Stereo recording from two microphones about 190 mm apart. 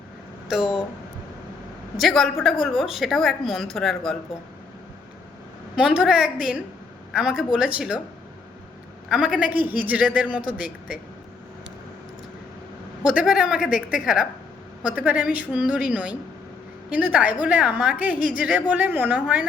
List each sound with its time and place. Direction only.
0.4 s speech: centre (ahead or behind)
2.0 s a woman's voice: centre (ahead or behind)
5.7 s a woman's voice: 5° right (ahead or behind)
9.0 s a man's voice: 5° right (ahead or behind)
13.1 s a woman's voice: 5° right (ahead or behind)